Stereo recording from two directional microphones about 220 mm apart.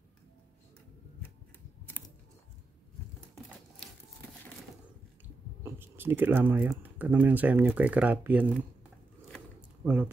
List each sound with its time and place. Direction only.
5.6 s speech: 10° right (ahead or behind)